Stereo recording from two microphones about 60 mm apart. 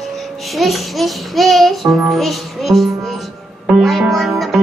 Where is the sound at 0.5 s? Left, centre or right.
Centre.